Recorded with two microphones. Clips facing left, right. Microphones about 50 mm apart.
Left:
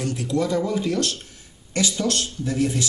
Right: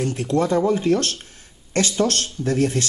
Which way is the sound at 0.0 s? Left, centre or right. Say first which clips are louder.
Right 3 dB; right.